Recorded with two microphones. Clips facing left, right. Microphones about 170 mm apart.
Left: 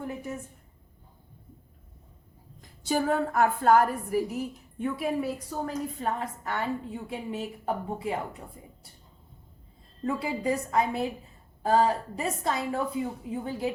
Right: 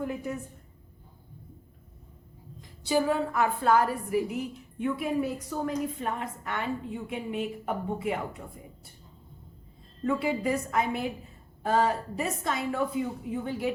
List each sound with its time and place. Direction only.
2.6 s a woman's voice: 50° left (ahead or behind); by 8.4 s 30° left (ahead or behind)
10.0 s a woman's voice: 30° left (ahead or behind)